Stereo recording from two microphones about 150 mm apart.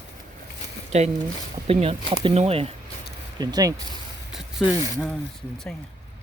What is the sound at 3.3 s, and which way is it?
Speech, 25° right (ahead or behind).